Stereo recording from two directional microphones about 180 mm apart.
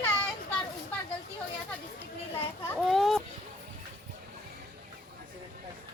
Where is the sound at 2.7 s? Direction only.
Centre (ahead or behind).